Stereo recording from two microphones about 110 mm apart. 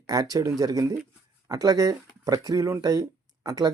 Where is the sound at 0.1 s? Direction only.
35° right (ahead or behind).